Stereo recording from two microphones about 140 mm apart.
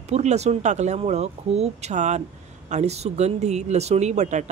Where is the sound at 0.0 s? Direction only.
50° right (ahead or behind).